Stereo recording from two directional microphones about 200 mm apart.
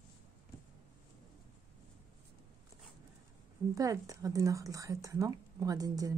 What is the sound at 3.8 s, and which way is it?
Speech, 15° right (ahead or behind).